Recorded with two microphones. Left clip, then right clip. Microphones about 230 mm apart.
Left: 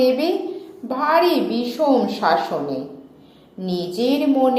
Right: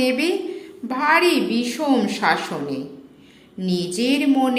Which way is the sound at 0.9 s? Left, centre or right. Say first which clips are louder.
Even; right.